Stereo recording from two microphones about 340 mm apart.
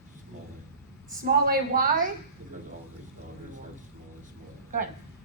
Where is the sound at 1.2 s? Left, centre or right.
Right.